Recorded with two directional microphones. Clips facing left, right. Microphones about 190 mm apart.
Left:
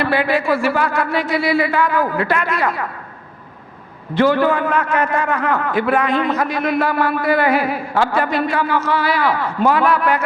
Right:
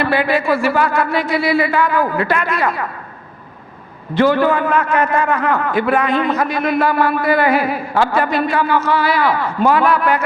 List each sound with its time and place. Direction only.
0.0 s a man's voice: 10° right (ahead or behind)
4.1 s a man's voice: 10° right (ahead or behind)